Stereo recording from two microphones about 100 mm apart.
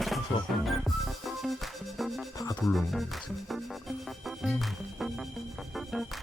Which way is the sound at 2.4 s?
35° left (ahead or behind).